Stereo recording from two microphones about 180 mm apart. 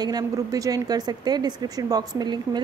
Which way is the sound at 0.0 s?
20° right (ahead or behind).